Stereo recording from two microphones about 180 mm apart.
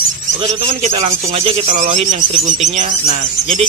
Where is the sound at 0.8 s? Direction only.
40° right (ahead or behind).